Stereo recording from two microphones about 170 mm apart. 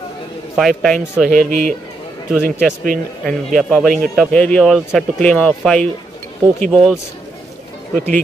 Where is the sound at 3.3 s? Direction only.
5° left (ahead or behind).